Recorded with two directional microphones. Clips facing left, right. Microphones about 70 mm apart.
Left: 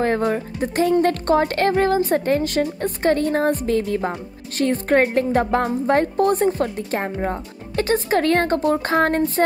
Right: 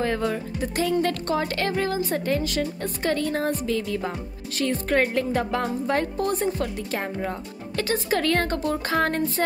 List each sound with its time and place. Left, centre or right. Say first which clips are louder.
0.0 s speech: left 5 dB; left